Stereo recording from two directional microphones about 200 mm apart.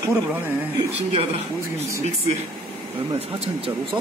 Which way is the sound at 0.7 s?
25° right (ahead or behind).